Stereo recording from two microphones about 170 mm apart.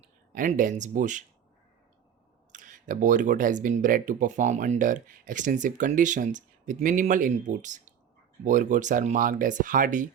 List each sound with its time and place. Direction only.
0.3 s speech: 50° right (ahead or behind)
2.5 s speech: 50° right (ahead or behind)